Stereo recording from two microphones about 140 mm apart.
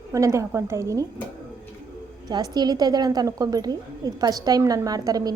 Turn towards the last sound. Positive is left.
turn(degrees=-25)  # may be behind; listen again after turning